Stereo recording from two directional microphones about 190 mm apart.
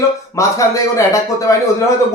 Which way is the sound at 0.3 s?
15° left (ahead or behind).